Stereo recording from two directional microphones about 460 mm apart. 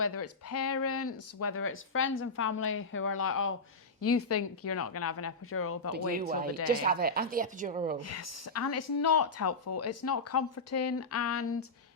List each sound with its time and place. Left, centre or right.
0.0 s speech: left
5.9 s speech: centre
8.0 s speech: left